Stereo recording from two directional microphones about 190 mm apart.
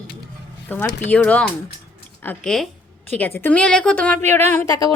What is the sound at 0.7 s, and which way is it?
A woman's voice, 10° left (ahead or behind).